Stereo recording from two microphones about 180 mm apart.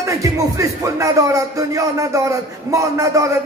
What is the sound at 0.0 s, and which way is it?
Music, 15° right (ahead or behind).